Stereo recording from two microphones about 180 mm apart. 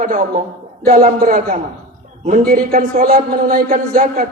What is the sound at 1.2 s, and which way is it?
A man's voice, 55° right (ahead or behind).